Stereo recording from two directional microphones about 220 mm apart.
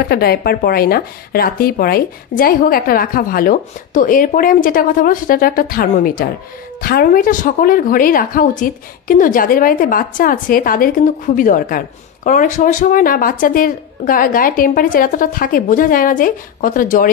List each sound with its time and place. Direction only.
0.1 s speech: 45° left (ahead or behind)